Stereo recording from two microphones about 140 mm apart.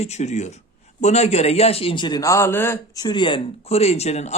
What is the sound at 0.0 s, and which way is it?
A man's voice, 55° left (ahead or behind).